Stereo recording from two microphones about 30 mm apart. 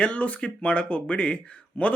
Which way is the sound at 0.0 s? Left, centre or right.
Left.